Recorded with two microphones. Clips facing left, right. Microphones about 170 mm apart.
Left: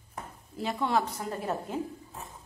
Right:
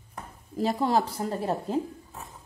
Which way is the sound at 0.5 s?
35° right (ahead or behind).